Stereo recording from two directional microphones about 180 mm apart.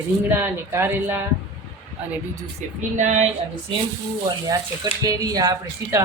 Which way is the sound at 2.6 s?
40° right (ahead or behind).